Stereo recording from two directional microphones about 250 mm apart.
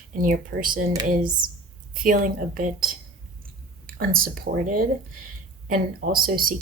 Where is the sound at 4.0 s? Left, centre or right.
Right.